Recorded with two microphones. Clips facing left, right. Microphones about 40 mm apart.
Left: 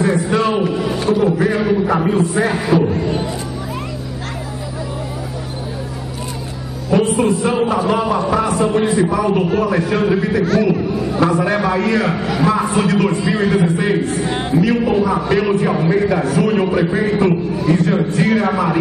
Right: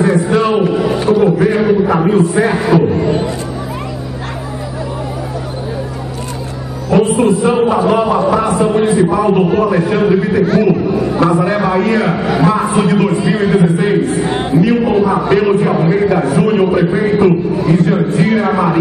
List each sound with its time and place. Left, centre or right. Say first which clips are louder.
0.0 s a sound: right 4 dB; centre
1.6 s a man's voice: right 4 dB; centre
6.9 s a man's voice: right 4 dB; centre